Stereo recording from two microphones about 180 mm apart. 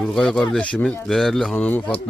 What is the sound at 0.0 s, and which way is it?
Speech, centre (ahead or behind).